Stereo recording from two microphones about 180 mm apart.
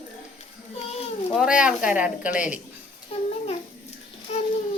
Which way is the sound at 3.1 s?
35° left (ahead or behind).